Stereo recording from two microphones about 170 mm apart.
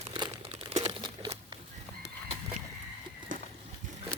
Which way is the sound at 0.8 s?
25° right (ahead or behind).